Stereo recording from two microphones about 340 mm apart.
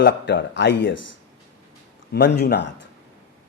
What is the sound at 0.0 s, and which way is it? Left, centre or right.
Speech, left.